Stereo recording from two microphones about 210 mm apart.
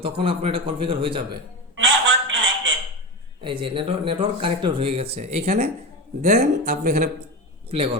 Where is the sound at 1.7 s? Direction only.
65° right (ahead or behind).